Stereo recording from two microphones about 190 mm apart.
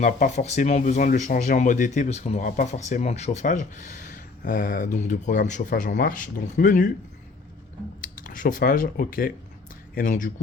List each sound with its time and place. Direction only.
0.0 s speech: 35° left (ahead or behind)
8.2 s speech: 45° left (ahead or behind)